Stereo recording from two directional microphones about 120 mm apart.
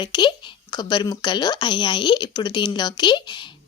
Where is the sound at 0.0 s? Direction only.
40° left (ahead or behind).